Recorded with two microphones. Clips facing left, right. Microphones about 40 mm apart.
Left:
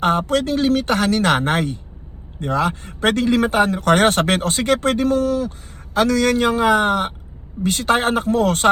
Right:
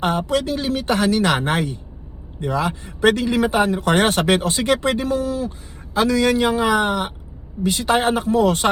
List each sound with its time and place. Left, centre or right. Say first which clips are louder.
0.0 s a man's voice: left 2 dB; left
6.1 s a man's voice: even; right
6.4 s speech: left 2 dB; left